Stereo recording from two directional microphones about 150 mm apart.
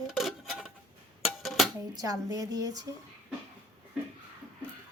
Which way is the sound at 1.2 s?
Centre (ahead or behind).